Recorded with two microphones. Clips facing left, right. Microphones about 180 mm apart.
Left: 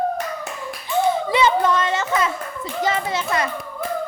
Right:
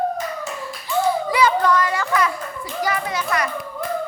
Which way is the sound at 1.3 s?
25° left (ahead or behind).